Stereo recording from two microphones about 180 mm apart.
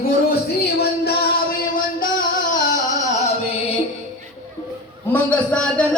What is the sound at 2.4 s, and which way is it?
Music, 45° left (ahead or behind).